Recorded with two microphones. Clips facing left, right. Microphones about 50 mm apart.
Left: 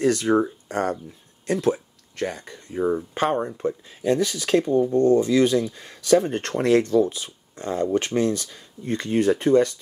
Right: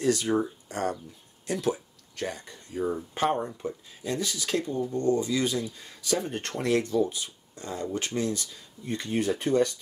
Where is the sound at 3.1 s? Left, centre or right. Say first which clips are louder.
Left 4 dB; left.